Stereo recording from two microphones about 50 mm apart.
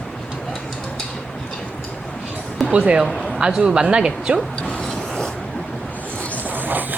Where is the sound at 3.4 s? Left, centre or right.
Centre.